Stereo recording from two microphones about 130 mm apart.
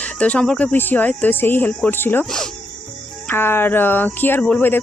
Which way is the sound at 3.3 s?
15° left (ahead or behind).